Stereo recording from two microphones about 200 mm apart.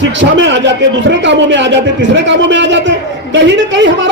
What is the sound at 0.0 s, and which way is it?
Speech, 65° right (ahead or behind).